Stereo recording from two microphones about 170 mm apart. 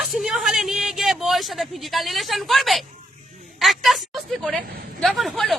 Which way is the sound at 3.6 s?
Centre (ahead or behind).